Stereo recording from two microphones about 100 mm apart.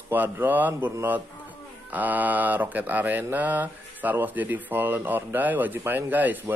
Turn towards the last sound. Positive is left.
turn(degrees=-20)  # may be behind; listen again after turning